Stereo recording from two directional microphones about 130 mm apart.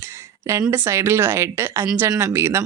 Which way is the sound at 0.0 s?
20° right (ahead or behind).